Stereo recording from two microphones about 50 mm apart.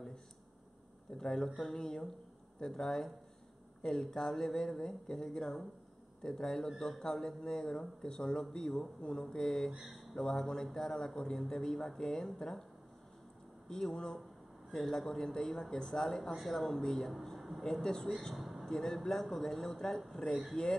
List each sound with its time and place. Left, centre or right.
1.1 s a man's voice: centre
9.8 s speech: centre
10.2 s a man's voice: centre
13.7 s a man's voice: centre
17.1 s a sound: centre
17.8 s a man's voice: centre
18.7 s a man's voice: centre